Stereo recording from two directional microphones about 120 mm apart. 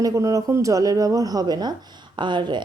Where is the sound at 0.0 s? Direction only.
30° right (ahead or behind).